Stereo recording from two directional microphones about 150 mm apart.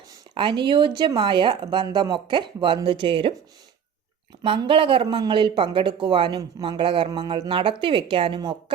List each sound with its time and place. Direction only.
0.3 s speech: 30° right (ahead or behind)
4.4 s speech: 35° right (ahead or behind)